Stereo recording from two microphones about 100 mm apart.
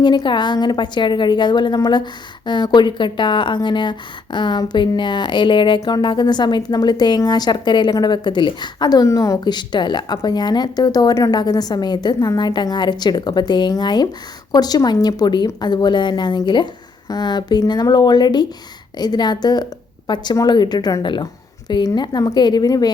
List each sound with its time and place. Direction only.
0.0 s speech: 50° left (ahead or behind); by 9.4 s 30° left (ahead or behind)
9.4 s a woman's voice: 45° left (ahead or behind)